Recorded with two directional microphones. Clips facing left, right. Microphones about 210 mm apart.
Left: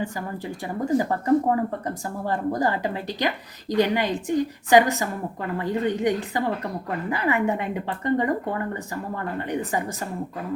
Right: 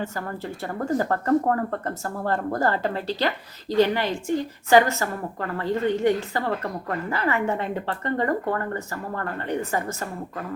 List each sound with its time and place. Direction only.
0.0 s speech: 15° left (ahead or behind)